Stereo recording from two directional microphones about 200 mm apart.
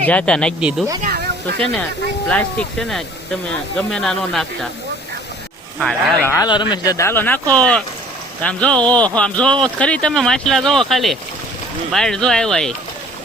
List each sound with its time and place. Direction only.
0.0 s speech: 5° left (ahead or behind)
1.0 s a sound: 55° right (ahead or behind)
1.5 s speech: 5° left (ahead or behind)
5.8 s speech: centre (ahead or behind)
6.2 s speech: 15° left (ahead or behind)